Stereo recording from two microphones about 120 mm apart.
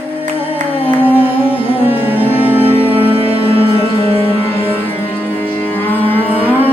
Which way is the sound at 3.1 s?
50° right (ahead or behind).